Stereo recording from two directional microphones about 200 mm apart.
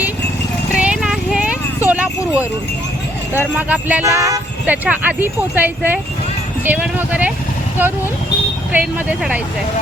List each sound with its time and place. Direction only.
0.7 s clip-clop: 5° right (ahead or behind)
3.3 s speech: 10° right (ahead or behind)
8.7 s speech: 5° right (ahead or behind)